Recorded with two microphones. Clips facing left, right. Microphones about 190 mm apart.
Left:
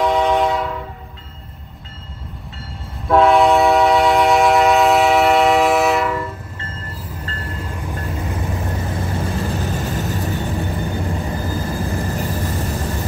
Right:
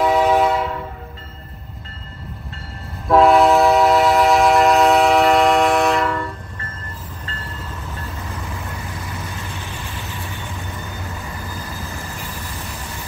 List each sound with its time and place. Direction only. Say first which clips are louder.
0.0 s train: right 1 dB; 5° right (ahead or behind)
3.1 s train: even; centre (ahead or behind)
7.2 s train: left 4 dB; 40° left (ahead or behind)
8.5 s vehicle: left 7 dB; 40° left (ahead or behind)